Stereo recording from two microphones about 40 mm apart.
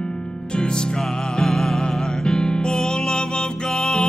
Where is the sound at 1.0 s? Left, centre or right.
Centre.